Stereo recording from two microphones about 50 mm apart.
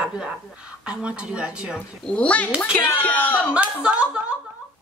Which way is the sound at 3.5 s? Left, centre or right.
Right.